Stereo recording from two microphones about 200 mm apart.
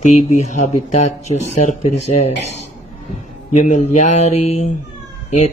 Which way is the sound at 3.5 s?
35° left (ahead or behind).